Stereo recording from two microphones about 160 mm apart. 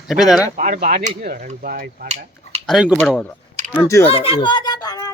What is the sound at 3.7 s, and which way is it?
Speech, 10° left (ahead or behind).